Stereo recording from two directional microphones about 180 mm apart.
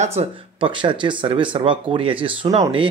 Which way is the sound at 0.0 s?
35° right (ahead or behind).